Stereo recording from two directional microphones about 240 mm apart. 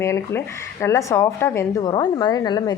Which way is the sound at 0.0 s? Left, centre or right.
Centre.